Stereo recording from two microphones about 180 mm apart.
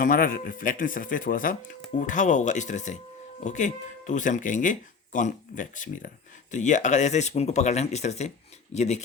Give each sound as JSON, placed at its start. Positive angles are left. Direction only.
{"t": 0.0, "sound": "speech", "side_deg": 50}